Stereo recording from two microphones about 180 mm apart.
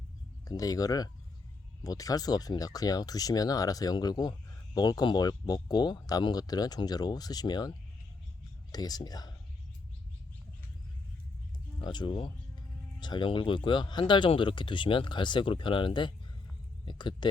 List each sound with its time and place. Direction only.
0.4 s speech: 20° left (ahead or behind)
11.8 s speech: 25° left (ahead or behind)